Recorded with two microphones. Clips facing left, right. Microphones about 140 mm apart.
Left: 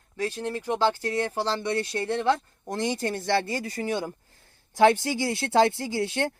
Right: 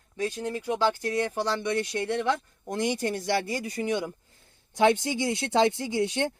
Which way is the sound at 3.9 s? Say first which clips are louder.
Even; 35° left (ahead or behind).